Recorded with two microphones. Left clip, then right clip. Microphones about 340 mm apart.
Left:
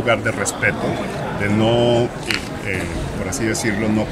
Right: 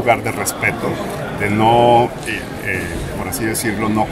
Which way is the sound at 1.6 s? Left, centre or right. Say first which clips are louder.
Right 6 dB; right.